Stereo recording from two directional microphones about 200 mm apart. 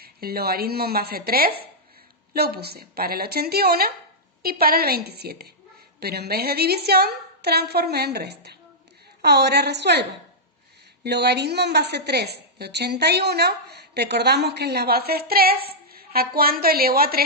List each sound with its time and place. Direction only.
0.0 s a woman's voice: 50° right (ahead or behind)